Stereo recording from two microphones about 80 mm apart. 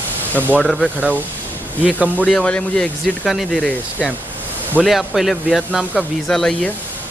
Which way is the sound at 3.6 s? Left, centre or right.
Centre.